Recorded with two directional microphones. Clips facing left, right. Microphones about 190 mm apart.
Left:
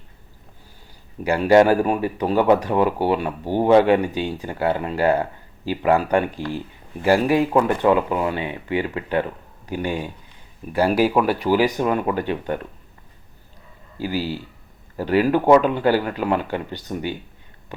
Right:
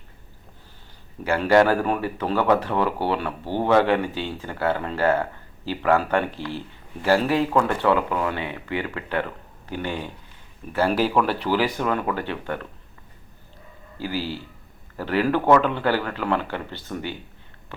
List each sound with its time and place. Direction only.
1.2 s speech: 15° left (ahead or behind)
14.0 s speech: 15° left (ahead or behind)
17.7 s a sound: 15° left (ahead or behind)